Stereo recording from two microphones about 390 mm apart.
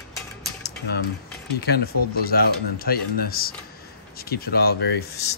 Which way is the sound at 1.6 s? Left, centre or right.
Left.